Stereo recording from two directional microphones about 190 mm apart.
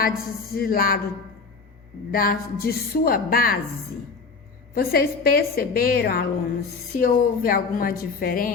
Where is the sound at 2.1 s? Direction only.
50° left (ahead or behind).